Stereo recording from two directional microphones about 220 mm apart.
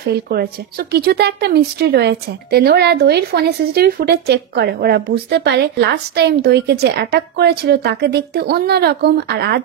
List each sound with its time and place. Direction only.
0.0 s a woman's voice: 45° right (ahead or behind)